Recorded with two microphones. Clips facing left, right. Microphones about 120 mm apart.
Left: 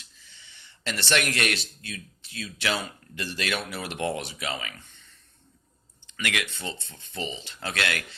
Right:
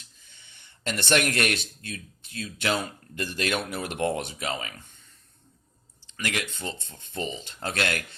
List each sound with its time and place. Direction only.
0.0 s a sound: 50° right (ahead or behind)
1.3 s speech: 50° right (ahead or behind)
6.1 s speech: 40° right (ahead or behind)